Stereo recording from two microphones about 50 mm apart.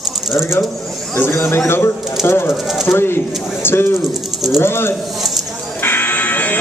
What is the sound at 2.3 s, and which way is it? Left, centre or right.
A man's voice, left.